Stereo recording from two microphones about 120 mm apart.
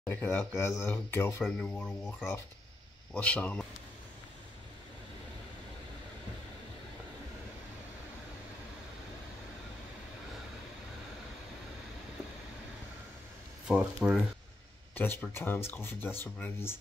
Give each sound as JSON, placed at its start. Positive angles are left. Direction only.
{"t": 0.0, "sound": "speech", "side_deg": 20}
{"t": 1.4, "sound": "speech", "side_deg": 5}
{"t": 13.7, "sound": "speech", "side_deg": -5}
{"t": 15.0, "sound": "speech", "side_deg": 15}